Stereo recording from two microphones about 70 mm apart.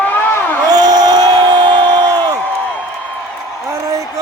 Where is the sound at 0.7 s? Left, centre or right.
Right.